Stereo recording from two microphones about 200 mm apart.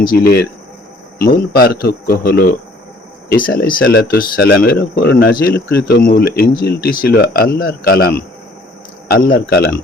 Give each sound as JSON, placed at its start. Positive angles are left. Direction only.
{"t": 0.1, "sound": "speech", "side_deg": 50}